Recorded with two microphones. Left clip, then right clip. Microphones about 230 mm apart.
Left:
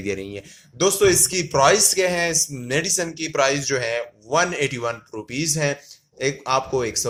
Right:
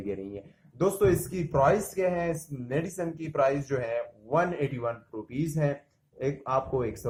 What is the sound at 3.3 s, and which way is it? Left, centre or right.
Speech, left.